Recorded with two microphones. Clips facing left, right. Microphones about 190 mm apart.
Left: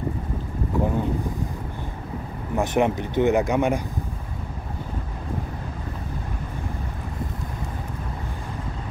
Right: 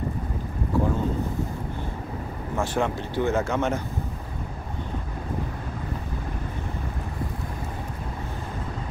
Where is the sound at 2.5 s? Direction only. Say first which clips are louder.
Left 4 dB; 20° left (ahead or behind).